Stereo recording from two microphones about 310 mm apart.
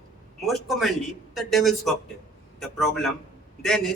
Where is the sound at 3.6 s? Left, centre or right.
Centre.